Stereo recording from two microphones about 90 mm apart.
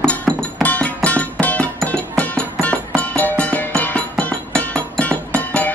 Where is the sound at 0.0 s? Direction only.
10° left (ahead or behind).